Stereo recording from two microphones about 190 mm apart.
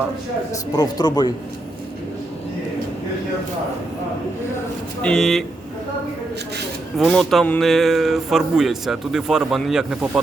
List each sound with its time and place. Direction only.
0.7 s speech: 20° left (ahead or behind)
5.0 s speech: centre (ahead or behind)
7.0 s speech: centre (ahead or behind)